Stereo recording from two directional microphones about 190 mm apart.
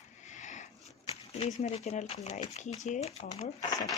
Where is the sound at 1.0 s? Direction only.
30° left (ahead or behind).